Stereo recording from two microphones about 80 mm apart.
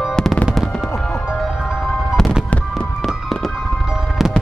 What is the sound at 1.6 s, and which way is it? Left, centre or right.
Music, centre.